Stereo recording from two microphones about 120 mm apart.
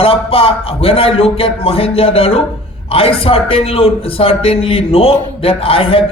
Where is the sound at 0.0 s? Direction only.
50° left (ahead or behind).